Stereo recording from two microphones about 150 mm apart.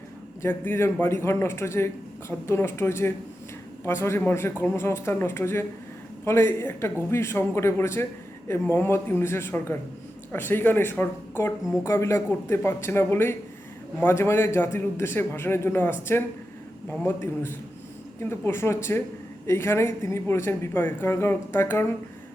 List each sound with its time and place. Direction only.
0.4 s a woman's voice: 15° left (ahead or behind)